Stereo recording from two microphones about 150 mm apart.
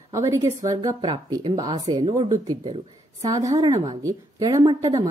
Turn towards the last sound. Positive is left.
turn(degrees=-25)  # may be behind; listen again after turning